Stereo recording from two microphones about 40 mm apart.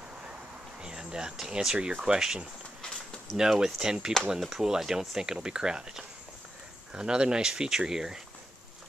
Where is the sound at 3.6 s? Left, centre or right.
Centre.